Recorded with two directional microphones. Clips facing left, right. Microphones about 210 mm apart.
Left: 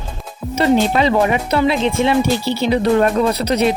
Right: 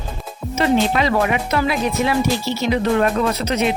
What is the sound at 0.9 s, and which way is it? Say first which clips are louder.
Speech: left 3 dB; 25° left (ahead or behind).